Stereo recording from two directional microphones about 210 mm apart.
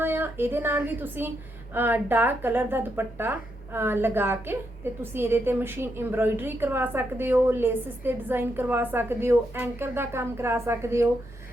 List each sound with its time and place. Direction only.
0.0 s speech: 10° right (ahead or behind)